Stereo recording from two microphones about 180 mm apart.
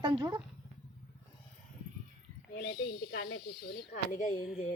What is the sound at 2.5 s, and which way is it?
Speech, 60° left (ahead or behind).